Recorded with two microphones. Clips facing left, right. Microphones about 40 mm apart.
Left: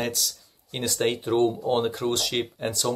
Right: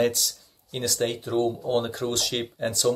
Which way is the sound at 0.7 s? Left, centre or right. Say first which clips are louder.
Left 1 dB; centre.